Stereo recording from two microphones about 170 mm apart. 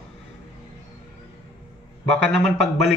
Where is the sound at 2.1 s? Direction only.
Centre (ahead or behind).